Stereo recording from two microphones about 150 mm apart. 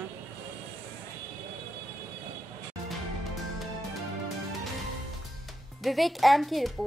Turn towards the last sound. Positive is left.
turn(degrees=0)  # may be behind; listen again after turning